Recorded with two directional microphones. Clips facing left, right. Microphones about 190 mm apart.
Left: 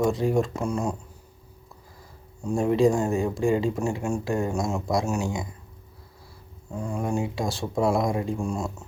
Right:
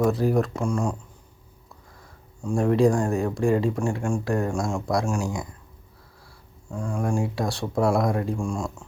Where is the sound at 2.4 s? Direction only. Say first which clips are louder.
Right 1 dB; 5° left (ahead or behind).